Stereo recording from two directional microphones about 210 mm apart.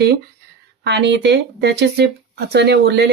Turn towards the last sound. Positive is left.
turn(degrees=-55)  # may be behind; listen again after turning